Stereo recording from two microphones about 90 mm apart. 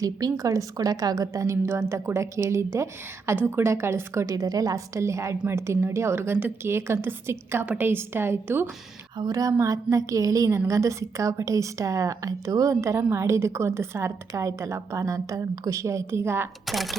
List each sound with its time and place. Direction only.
0.0 s a woman's voice: 40° right (ahead or behind); by 8.6 s 25° right (ahead or behind)
9.1 s a woman's voice: 45° right (ahead or behind); by 16.5 s 25° right (ahead or behind)
16.6 s speech: centre (ahead or behind)